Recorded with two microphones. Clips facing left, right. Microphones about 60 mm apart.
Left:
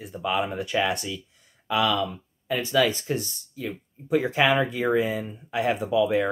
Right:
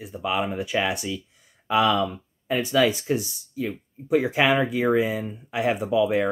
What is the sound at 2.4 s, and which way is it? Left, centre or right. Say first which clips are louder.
Speech: right 2 dB; centre.